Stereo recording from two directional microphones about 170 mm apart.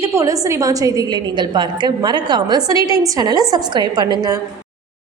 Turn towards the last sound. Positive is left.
turn(degrees=-25)  # may be behind; listen again after turning